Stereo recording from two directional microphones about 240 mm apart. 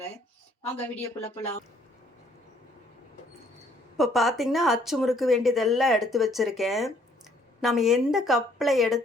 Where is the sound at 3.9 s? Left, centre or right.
Centre.